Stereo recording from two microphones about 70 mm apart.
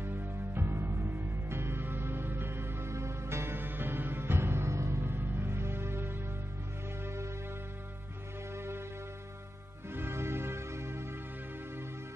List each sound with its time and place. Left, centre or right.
0.0 s music: right
8.5 s music: right
9.8 s music: right